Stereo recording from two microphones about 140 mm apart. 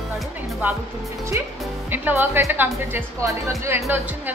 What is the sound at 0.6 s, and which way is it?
A woman's voice, 15° right (ahead or behind).